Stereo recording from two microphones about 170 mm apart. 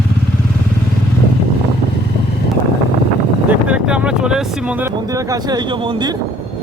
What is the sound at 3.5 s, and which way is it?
Speech, 5° right (ahead or behind).